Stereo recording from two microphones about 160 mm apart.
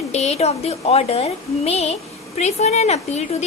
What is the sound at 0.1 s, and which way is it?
A woman's voice, 45° left (ahead or behind).